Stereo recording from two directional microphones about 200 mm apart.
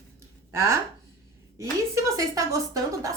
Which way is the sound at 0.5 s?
15° right (ahead or behind).